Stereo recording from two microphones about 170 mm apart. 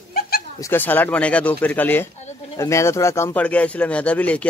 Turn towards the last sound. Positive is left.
turn(degrees=10)  # may be behind; listen again after turning